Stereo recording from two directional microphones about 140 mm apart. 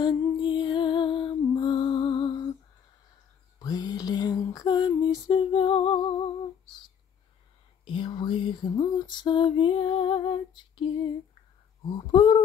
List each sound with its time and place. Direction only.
0.0 s music: 35° left (ahead or behind)
3.5 s a sound: 30° left (ahead or behind)
5.3 s lullaby: 40° left (ahead or behind)
7.8 s lullaby: 35° left (ahead or behind)